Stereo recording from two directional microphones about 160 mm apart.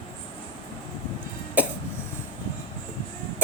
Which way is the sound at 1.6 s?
10° right (ahead or behind).